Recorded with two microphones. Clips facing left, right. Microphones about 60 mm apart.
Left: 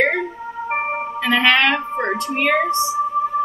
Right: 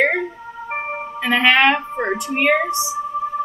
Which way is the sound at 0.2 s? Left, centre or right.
Centre.